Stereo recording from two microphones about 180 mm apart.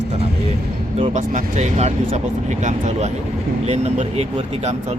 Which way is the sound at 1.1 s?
40° right (ahead or behind).